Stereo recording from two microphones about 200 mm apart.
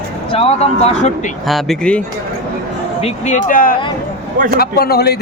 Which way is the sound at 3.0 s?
35° left (ahead or behind).